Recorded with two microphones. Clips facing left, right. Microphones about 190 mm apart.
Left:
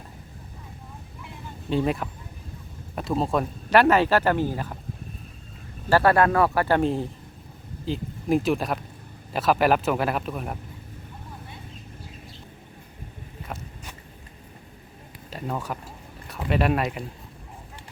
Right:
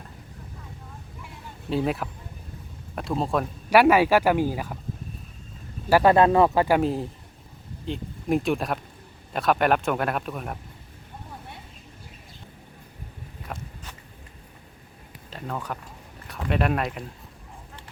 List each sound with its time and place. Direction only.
1.7 s a man's voice: centre (ahead or behind)
3.7 s speech: 10° right (ahead or behind)
5.9 s speech: 15° right (ahead or behind)
6.7 s a man's voice: centre (ahead or behind)
15.3 s a man's voice: 10° left (ahead or behind)